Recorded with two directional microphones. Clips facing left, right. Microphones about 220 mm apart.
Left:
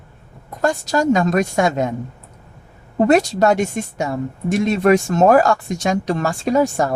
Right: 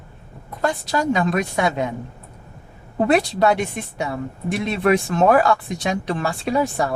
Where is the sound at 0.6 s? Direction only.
45° left (ahead or behind).